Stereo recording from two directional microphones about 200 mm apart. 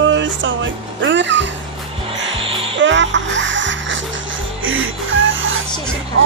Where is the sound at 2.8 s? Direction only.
65° right (ahead or behind).